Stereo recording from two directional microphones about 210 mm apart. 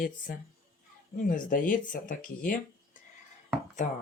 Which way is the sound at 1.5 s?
40° left (ahead or behind).